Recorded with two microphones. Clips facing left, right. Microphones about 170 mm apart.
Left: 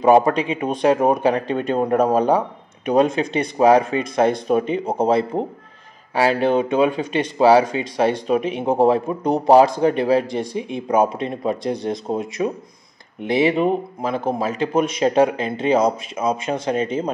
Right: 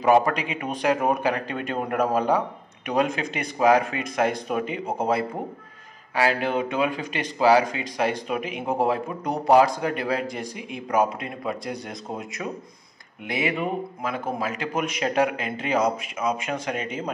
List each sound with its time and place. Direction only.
0.0 s speech: 25° left (ahead or behind)